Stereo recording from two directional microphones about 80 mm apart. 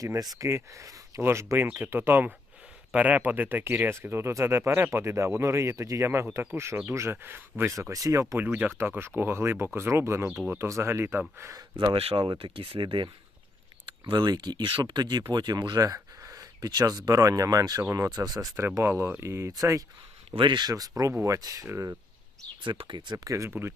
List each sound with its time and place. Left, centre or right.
0.0 s speech: right
1.6 s speech: right
7.7 s speech: right
8.4 s speech: right
11.8 s speech: right
14.0 s speech: right
15.8 s a sound: right
17.1 s speech: right
18.8 s speech: right
20.4 s speech: right
22.6 s speech: right
23.1 s speech: right
23.5 s speech: right